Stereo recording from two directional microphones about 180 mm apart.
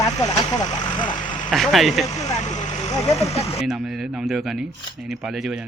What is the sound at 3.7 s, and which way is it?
Speech, centre (ahead or behind).